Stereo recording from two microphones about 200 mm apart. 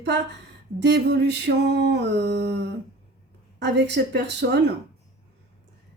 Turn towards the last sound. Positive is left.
turn(degrees=-60)  # may be behind; listen again after turning